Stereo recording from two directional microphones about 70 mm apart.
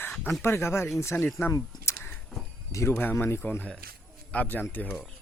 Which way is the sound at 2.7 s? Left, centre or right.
Left.